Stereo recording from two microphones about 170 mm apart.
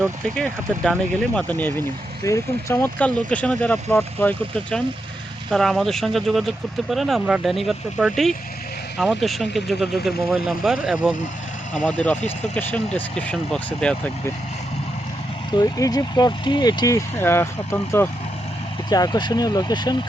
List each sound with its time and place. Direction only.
0.3 s speech: 5° left (ahead or behind)
15.5 s speech: 20° left (ahead or behind)